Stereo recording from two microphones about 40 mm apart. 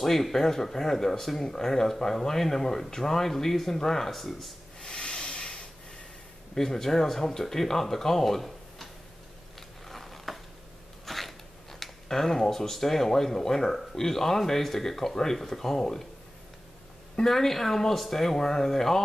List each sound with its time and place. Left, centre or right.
0.0 s speech: centre
4.9 s hiss: left
6.5 s speech: centre
9.6 s a sound: centre
11.8 s speech: centre
17.2 s speech: centre